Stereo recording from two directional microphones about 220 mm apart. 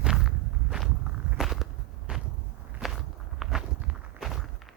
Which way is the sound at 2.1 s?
5° right (ahead or behind).